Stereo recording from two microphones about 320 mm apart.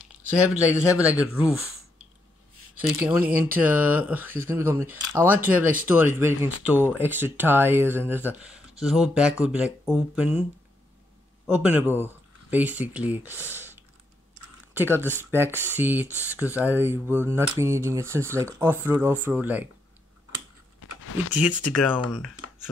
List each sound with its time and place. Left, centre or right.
0.3 s speech: centre
3.0 s speech: centre
11.4 s speech: centre
20.8 s a sound: left
21.3 s speech: centre